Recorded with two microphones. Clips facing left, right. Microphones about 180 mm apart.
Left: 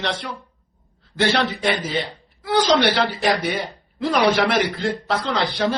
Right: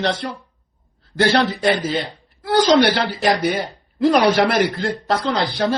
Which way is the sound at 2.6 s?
45° right (ahead or behind).